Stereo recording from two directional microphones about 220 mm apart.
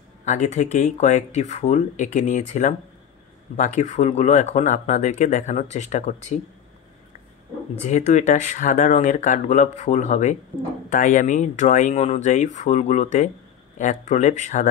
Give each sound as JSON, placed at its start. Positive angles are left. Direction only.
{"t": 0.2, "sound": "speech", "side_deg": 35}
{"t": 7.8, "sound": "speech", "side_deg": 35}